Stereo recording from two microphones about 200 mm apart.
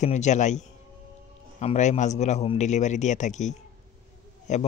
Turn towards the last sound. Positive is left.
turn(degrees=35)  # may be behind; listen again after turning